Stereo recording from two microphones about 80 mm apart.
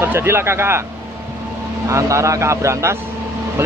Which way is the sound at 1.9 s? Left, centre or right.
Right.